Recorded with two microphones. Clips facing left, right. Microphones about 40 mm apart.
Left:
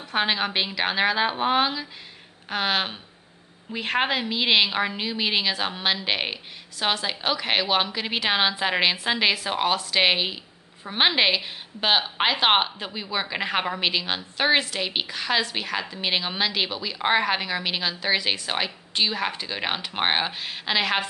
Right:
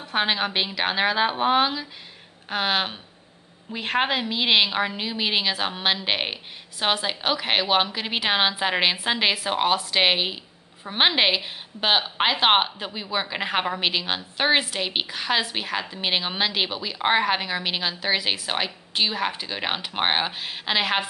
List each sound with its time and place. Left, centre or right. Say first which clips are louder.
0.0 s a woman's voice: even; centre